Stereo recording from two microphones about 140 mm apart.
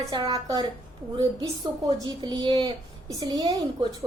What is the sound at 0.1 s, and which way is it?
A woman's voice, 30° right (ahead or behind).